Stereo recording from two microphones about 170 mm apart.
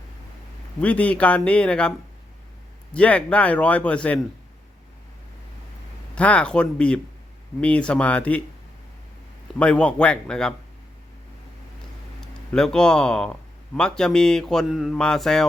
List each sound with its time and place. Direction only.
0.8 s speech: 10° left (ahead or behind)
2.9 s speech: 5° left (ahead or behind)
6.1 s speech: 5° left (ahead or behind)
9.6 s a man's voice: 5° left (ahead or behind)
12.2 s a man's voice: 5° left (ahead or behind)